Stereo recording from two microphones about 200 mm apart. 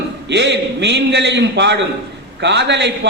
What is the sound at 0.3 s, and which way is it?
A man's voice, 60° right (ahead or behind).